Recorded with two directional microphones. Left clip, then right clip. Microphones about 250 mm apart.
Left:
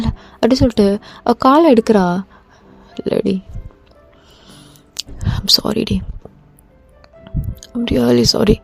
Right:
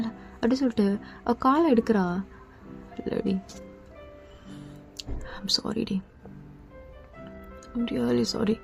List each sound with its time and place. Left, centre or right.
0.0 s a woman's voice: left
4.9 s speech: left
7.6 s a woman's voice: left